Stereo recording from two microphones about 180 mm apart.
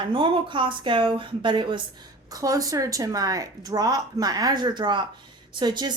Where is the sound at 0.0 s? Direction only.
25° right (ahead or behind).